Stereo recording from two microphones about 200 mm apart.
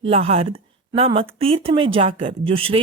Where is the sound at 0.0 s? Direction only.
30° right (ahead or behind).